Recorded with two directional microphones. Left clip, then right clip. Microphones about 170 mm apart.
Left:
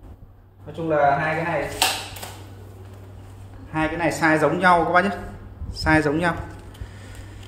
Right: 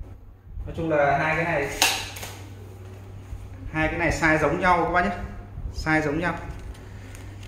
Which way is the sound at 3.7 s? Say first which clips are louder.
Left 1 dB; 40° left (ahead or behind).